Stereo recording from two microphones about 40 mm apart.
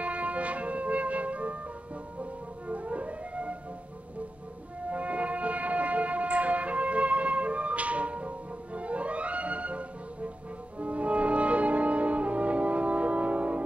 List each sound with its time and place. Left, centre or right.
0.0 s music: right
2.7 s theremin: right
4.8 s music: right